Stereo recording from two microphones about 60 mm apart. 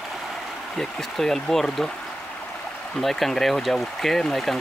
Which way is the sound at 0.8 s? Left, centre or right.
Centre.